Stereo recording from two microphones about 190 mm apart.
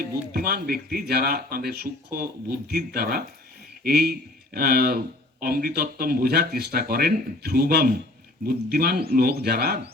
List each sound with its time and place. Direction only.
0.3 s speech: 50° right (ahead or behind)